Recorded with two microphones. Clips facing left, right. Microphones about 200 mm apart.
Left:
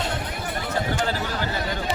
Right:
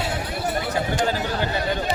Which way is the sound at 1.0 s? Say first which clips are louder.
Right 3 dB; 15° right (ahead or behind).